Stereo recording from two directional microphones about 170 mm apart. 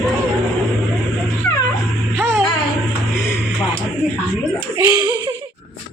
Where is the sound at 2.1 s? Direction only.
15° right (ahead or behind).